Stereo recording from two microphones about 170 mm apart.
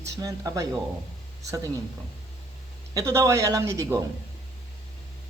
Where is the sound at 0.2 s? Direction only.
20° right (ahead or behind).